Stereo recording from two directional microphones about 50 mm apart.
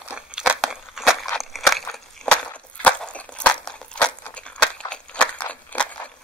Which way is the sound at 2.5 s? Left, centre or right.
Left.